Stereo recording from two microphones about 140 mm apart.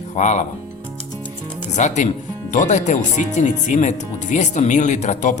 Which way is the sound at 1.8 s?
60° left (ahead or behind).